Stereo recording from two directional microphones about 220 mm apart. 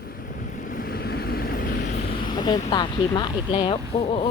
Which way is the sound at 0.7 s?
45° left (ahead or behind).